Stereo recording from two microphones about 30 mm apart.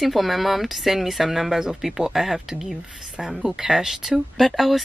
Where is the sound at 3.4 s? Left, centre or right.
Centre.